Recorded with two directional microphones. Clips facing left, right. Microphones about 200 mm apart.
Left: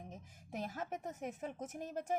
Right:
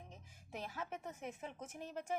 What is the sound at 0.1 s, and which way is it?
A woman's voice, 45° left (ahead or behind).